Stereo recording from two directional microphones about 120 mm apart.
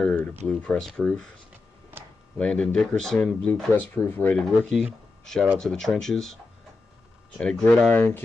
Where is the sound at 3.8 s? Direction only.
15° left (ahead or behind).